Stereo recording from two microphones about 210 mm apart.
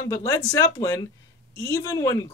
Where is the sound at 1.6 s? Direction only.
15° left (ahead or behind).